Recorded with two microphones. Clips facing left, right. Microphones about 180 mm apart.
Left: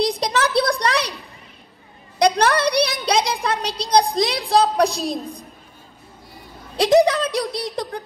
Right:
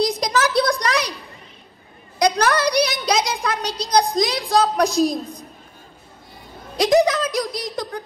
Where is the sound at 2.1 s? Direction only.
30° left (ahead or behind).